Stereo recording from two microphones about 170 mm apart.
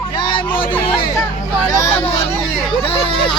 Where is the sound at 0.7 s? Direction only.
30° left (ahead or behind).